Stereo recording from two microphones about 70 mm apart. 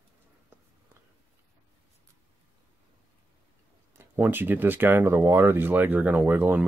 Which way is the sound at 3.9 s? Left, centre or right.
Right.